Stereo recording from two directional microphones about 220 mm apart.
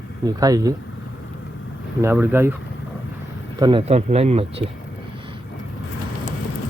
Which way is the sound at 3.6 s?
25° right (ahead or behind).